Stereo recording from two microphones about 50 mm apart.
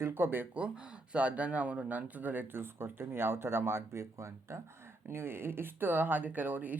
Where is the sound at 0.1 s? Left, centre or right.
Right.